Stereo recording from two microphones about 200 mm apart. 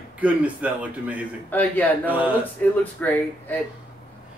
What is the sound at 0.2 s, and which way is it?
A man's voice, 5° right (ahead or behind).